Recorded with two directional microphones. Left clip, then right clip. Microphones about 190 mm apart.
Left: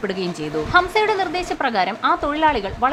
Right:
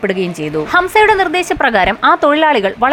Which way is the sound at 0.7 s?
30° right (ahead or behind).